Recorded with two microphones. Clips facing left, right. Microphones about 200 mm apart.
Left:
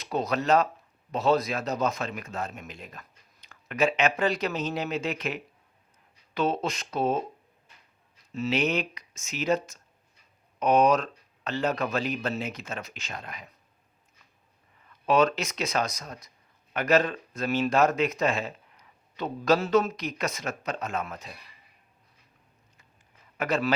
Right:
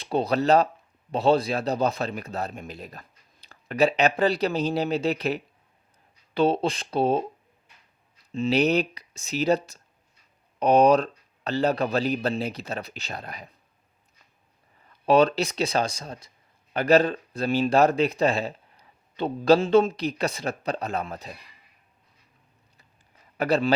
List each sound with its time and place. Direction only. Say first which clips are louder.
0.0 s speech: right 4 dB; 30° right (ahead or behind)
8.3 s speech: right 5 dB; 30° right (ahead or behind)
15.0 s speech: right 4 dB; 35° right (ahead or behind)
23.4 s speech: right 4 dB; 30° right (ahead or behind)